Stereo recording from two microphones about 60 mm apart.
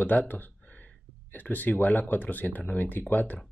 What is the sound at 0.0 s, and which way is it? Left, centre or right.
Speech, left.